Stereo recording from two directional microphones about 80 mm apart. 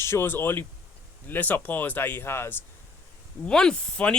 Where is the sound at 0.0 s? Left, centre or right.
Left.